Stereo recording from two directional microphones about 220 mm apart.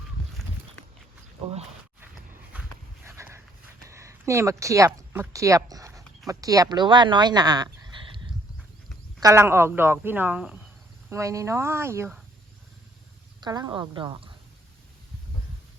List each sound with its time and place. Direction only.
3.1 s dog: 10° right (ahead or behind)
3.8 s speech: 15° right (ahead or behind)
9.2 s speech: 10° right (ahead or behind)
13.4 s a woman's voice: 20° right (ahead or behind)